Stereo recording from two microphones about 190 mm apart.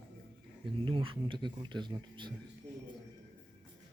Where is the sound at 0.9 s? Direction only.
25° right (ahead or behind).